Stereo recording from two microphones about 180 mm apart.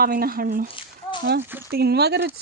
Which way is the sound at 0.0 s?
55° right (ahead or behind).